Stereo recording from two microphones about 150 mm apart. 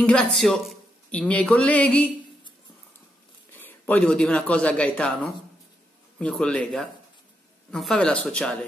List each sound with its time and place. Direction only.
0.0 s speech: 5° left (ahead or behind)
3.5 s speech: 15° left (ahead or behind)